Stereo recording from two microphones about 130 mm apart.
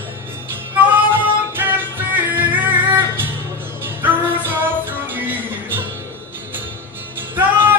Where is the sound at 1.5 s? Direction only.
15° right (ahead or behind).